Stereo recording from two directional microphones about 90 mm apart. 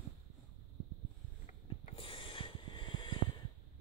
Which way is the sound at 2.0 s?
75° left (ahead or behind).